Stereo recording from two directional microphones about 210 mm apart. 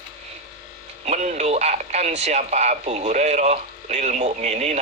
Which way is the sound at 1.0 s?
35° right (ahead or behind).